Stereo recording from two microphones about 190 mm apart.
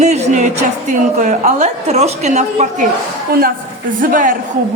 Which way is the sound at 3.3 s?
50° right (ahead or behind).